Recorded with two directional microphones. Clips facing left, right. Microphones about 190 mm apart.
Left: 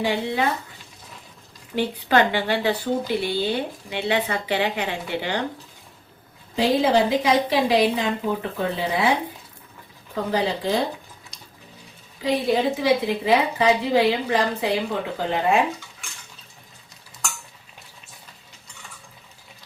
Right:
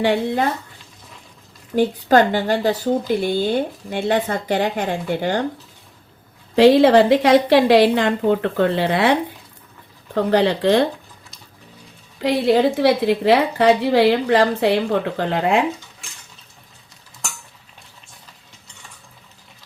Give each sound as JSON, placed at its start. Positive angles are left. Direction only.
{"t": 1.7, "sound": "speech", "side_deg": -45}
{"t": 6.6, "sound": "a woman's voice", "side_deg": -75}
{"t": 10.2, "sound": "a woman's voice", "side_deg": -70}
{"t": 12.2, "sound": "a woman's voice", "side_deg": -75}